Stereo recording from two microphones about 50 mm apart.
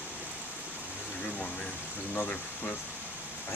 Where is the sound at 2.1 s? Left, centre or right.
Left.